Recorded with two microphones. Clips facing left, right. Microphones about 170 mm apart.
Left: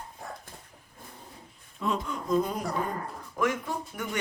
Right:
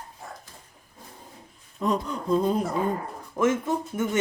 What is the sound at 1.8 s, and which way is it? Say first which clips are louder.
A man's voice: right 4 dB; 35° right (ahead or behind).